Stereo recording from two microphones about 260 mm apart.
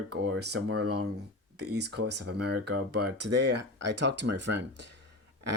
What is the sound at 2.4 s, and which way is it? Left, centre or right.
Speech, right.